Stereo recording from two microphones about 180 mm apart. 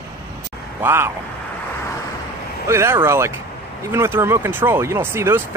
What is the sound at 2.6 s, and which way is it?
Speech, 15° right (ahead or behind).